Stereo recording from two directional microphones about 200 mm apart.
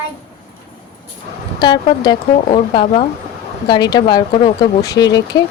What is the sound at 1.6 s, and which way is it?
Speech, 20° left (ahead or behind).